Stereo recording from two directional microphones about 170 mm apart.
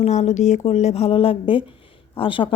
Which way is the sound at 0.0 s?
40° left (ahead or behind).